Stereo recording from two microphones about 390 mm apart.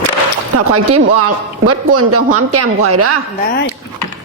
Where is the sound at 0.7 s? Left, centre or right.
Right.